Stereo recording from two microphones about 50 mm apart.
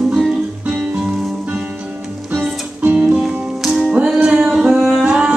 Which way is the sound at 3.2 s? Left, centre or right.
Centre.